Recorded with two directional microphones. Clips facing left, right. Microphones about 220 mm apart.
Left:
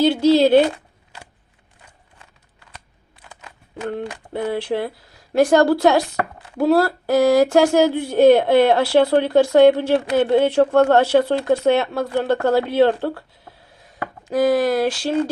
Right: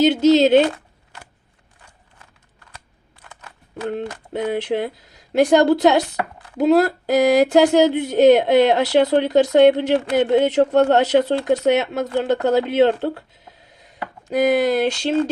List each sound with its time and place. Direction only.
0.0 s speech: 20° right (ahead or behind)
4.4 s speech: 20° right (ahead or behind)
14.3 s speech: 20° right (ahead or behind)